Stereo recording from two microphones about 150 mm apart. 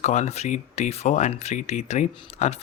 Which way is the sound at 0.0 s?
50° left (ahead or behind).